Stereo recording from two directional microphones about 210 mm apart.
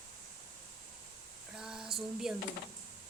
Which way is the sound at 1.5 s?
5° right (ahead or behind).